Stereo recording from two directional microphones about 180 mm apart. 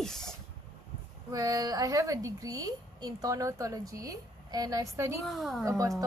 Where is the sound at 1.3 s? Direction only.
20° right (ahead or behind).